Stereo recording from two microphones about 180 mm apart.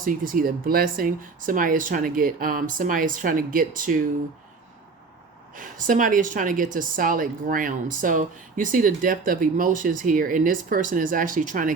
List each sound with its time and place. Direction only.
0.0 s a woman's voice: 50° right (ahead or behind)
5.5 s a woman's voice: 50° right (ahead or behind)